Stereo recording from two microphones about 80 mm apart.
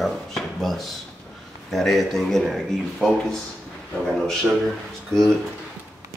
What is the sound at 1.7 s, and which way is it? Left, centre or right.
Speech, centre.